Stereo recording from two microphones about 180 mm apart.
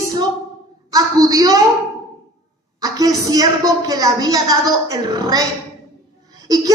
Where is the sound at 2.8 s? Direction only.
20° right (ahead or behind).